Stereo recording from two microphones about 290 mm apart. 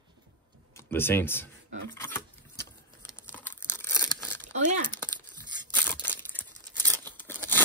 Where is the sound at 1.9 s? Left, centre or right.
Centre.